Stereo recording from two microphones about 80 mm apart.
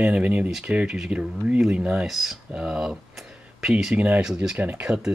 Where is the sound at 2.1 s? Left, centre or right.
Centre.